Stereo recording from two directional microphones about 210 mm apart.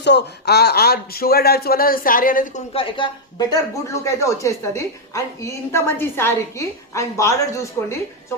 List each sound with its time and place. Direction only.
0.0 s speech: 55° left (ahead or behind)
2.7 s speech: 25° left (ahead or behind)